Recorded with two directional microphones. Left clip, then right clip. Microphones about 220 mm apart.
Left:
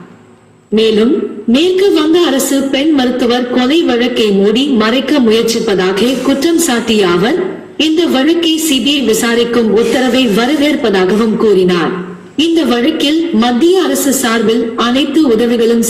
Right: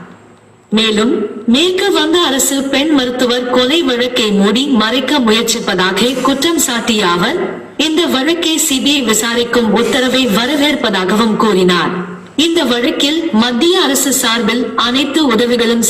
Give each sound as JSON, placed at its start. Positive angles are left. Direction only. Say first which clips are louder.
{"t": 1.5, "sound": "a woman's voice", "louder": "left 2 dB", "side_deg": -60}